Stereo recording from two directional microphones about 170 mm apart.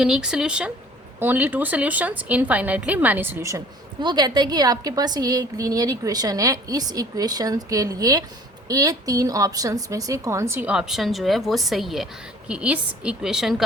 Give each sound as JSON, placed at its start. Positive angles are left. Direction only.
{"t": 0.0, "sound": "a woman's voice", "side_deg": -5}